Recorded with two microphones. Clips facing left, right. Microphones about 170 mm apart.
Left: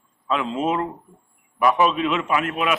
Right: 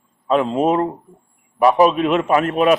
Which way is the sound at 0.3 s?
45° right (ahead or behind).